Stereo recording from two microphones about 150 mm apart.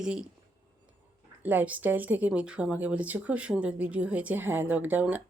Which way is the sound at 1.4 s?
10° right (ahead or behind).